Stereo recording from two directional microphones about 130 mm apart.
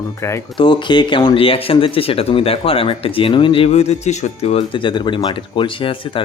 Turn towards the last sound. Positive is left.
turn(degrees=40)  # may be behind; listen again after turning